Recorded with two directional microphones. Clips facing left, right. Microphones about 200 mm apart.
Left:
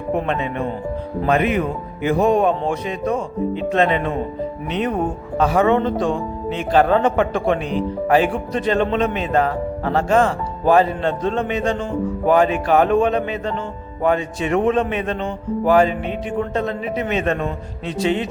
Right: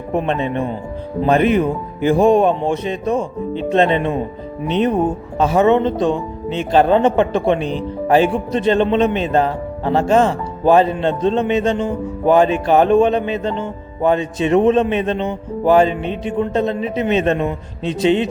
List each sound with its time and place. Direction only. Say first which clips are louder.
0.3 s a man's voice: right 3 dB; 30° right (ahead or behind)